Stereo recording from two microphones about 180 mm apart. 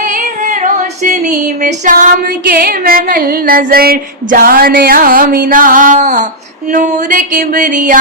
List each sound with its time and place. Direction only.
0.1 s a sound: 45° right (ahead or behind)
1.6 s music: 45° right (ahead or behind)
2.5 s music: 55° right (ahead or behind)